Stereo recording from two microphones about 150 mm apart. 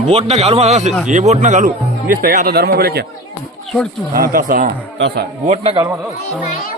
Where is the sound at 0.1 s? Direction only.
45° right (ahead or behind); by 3.1 s 90° right.